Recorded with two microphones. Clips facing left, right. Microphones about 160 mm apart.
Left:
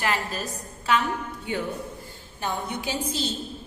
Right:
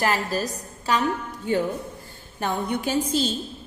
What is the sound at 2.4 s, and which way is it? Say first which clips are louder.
Speech: right 4 dB; 50° right (ahead or behind).